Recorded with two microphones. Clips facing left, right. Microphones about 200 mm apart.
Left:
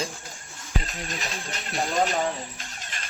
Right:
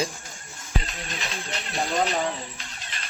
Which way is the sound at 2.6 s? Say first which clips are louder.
Even; 45° left (ahead or behind).